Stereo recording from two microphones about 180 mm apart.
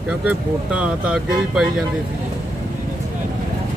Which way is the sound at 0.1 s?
5° right (ahead or behind).